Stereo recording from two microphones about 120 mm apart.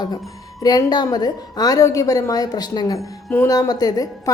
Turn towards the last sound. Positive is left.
turn(degrees=30)  # may be behind; listen again after turning